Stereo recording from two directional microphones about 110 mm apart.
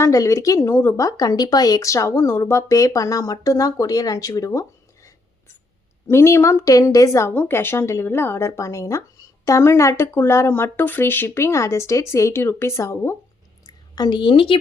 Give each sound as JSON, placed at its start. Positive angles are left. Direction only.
{"t": 0.0, "sound": "speech", "side_deg": 30}
{"t": 6.1, "sound": "a woman's voice", "side_deg": 25}
{"t": 13.9, "sound": "a woman's voice", "side_deg": 40}